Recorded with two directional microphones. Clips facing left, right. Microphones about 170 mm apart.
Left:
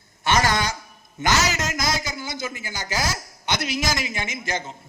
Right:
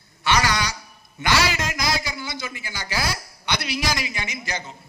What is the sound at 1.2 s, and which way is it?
A man's voice, 45° left (ahead or behind).